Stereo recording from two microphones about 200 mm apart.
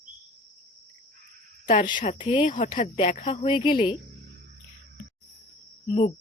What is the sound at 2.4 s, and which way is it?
Speech, 40° left (ahead or behind).